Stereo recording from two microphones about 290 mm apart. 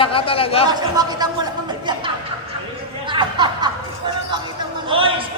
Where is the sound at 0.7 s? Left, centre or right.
Centre.